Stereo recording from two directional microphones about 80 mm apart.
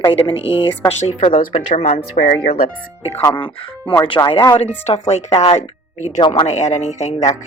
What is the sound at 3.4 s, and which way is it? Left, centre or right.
Speech, left.